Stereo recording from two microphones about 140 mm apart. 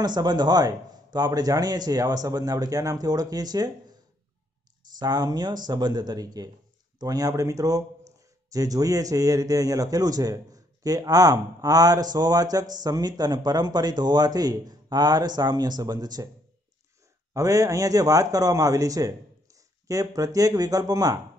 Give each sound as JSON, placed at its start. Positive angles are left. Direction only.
{"t": 0.0, "sound": "speech", "side_deg": -30}
{"t": 4.9, "sound": "speech", "side_deg": -30}
{"t": 17.3, "sound": "speech", "side_deg": -25}